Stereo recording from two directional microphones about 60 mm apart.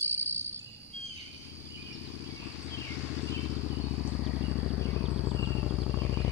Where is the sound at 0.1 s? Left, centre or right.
Right.